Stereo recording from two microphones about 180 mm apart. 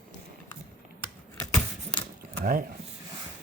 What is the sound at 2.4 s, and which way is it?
Speech, 55° right (ahead or behind).